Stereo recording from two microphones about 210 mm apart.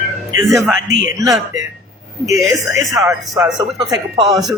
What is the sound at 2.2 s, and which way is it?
Speech, 15° right (ahead or behind).